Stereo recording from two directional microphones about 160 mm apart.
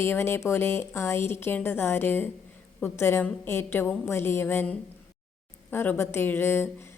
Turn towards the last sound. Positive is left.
turn(degrees=15)  # may be behind; listen again after turning